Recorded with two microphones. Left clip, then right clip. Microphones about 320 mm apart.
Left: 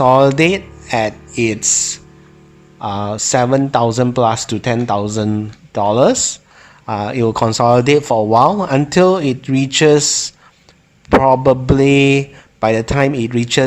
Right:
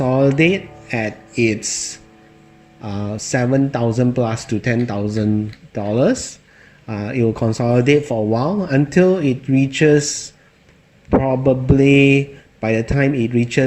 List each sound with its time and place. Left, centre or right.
0.1 s speech: centre
7.2 s speech: left
7.7 s speech: centre
7.9 s a man's voice: left
8.3 s speech: centre
11.1 s a man's voice: left
11.6 s speech: centre